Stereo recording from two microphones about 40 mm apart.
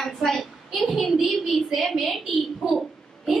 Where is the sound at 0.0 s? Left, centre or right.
Centre.